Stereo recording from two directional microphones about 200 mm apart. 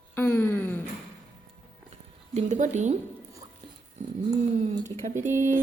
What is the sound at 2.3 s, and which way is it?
Speech, 35° right (ahead or behind).